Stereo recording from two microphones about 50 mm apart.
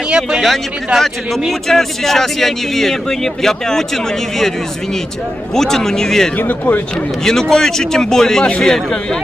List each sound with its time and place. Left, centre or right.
0.1 s speech: centre
0.9 s speech: centre
5.5 s speech: centre
6.5 s speech: left
7.3 s speech: centre